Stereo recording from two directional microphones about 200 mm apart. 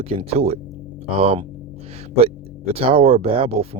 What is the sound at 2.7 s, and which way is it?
Speech, 30° right (ahead or behind).